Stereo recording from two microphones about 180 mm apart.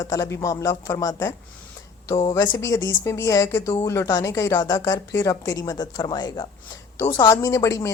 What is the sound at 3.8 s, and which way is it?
Speech, 15° left (ahead or behind).